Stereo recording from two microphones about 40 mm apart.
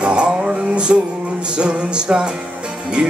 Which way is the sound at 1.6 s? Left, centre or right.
Right.